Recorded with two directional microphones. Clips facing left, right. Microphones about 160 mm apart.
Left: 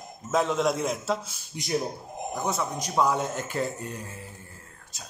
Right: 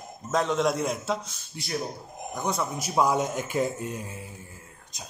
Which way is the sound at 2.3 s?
5° left (ahead or behind).